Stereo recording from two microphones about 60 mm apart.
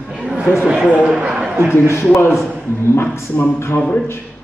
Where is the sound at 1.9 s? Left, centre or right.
Left.